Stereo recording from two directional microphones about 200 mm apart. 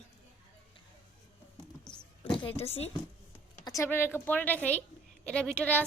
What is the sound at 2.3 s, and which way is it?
Speech, 30° left (ahead or behind).